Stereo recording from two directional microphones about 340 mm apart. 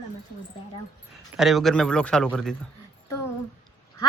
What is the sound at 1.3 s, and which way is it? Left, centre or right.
Speech, centre.